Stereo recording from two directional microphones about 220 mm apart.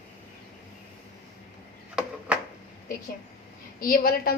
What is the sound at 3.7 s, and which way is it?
Speech, 40° left (ahead or behind).